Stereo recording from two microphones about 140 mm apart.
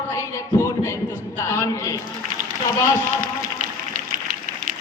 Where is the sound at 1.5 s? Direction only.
20° left (ahead or behind).